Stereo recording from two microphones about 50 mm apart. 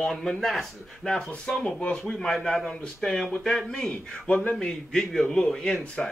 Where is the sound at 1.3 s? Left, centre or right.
Centre.